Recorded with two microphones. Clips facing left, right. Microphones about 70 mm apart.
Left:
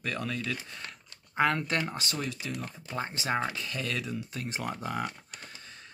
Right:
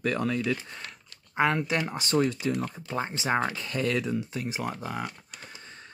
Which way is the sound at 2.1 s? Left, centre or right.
Right.